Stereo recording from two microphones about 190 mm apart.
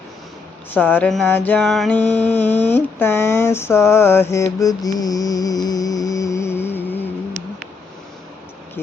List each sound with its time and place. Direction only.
0.7 s mantra: 10° left (ahead or behind)